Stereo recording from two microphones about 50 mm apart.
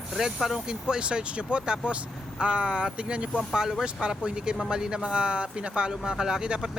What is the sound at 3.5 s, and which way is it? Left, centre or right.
Speech, centre.